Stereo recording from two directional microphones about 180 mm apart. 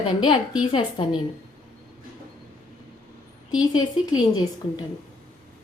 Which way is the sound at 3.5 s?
25° left (ahead or behind).